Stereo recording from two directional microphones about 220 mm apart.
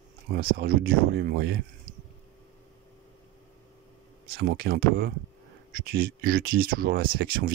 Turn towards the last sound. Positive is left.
turn(degrees=-40)  # may be behind; listen again after turning